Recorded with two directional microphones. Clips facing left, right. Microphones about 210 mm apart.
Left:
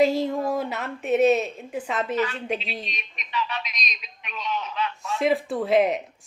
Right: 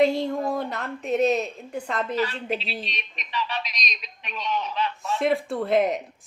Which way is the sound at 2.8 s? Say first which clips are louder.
Right 1 dB; 35° right (ahead or behind).